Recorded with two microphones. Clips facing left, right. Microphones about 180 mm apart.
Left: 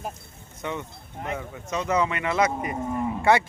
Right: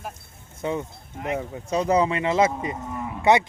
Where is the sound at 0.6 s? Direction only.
35° right (ahead or behind).